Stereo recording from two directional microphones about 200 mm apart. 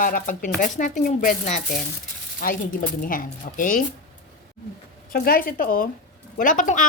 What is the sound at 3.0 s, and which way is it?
Speech, 45° left (ahead or behind).